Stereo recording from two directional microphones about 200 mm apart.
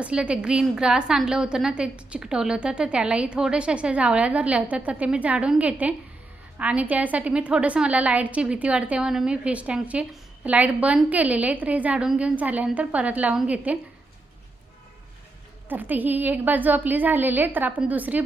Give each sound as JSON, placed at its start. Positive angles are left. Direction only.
{"t": 0.0, "sound": "a woman's voice", "side_deg": -5}
{"t": 15.7, "sound": "a woman's voice", "side_deg": -10}